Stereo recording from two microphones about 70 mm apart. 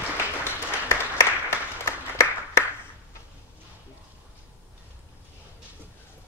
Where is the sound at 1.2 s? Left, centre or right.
Left.